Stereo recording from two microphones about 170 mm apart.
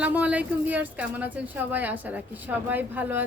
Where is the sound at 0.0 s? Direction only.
10° right (ahead or behind).